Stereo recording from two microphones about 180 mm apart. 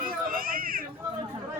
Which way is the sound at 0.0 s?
50° right (ahead or behind).